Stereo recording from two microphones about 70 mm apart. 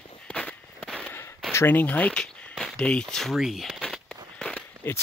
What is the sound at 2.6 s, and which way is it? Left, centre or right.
Speech, centre.